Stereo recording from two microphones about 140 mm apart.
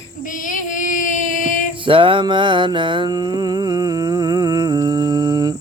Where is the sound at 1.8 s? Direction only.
40° right (ahead or behind).